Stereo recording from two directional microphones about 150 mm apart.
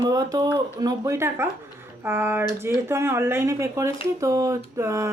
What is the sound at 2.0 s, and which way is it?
Speech, 15° right (ahead or behind).